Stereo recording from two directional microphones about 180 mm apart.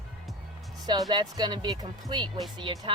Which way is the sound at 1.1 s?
25° right (ahead or behind).